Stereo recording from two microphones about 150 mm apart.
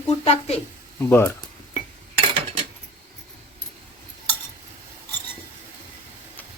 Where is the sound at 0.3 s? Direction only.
45° left (ahead or behind).